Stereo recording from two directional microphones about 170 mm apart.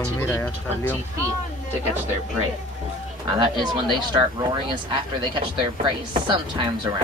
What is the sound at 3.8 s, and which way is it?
Speech, 25° right (ahead or behind).